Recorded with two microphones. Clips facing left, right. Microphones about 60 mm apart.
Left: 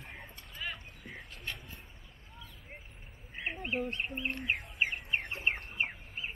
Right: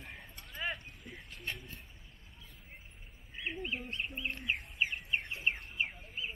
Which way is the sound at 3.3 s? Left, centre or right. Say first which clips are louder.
Left 3 dB; left.